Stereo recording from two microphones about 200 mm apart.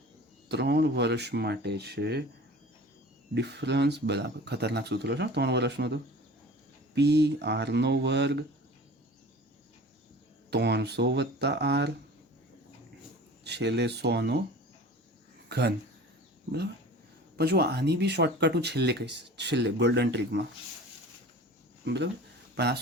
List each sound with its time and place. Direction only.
0.4 s speech: 55° right (ahead or behind)
3.3 s speech: 55° right (ahead or behind)
10.5 s speech: 55° right (ahead or behind)
13.4 s speech: 60° right (ahead or behind)
15.4 s speech: 55° right (ahead or behind)
17.3 s speech: 55° right (ahead or behind)
21.8 s speech: 60° right (ahead or behind)